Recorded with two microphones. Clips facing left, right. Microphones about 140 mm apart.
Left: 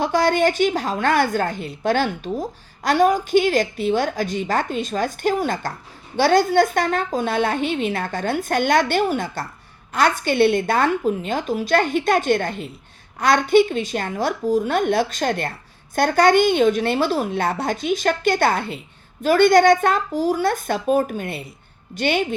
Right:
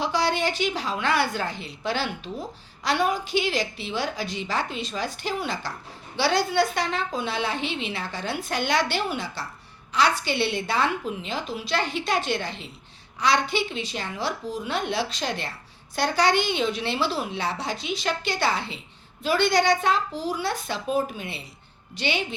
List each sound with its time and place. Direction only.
0.0 s a woman's voice: 50° left (ahead or behind)